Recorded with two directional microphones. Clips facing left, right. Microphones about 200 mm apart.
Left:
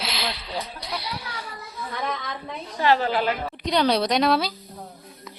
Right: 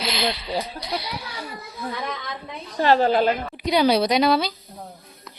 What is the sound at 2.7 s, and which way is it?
Speech, 40° right (ahead or behind).